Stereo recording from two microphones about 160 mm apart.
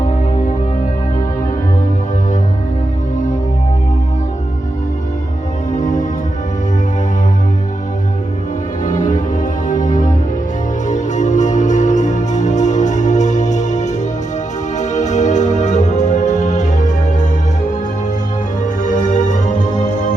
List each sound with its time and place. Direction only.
5.7 s music: 50° left (ahead or behind)
8.8 s music: 55° left (ahead or behind)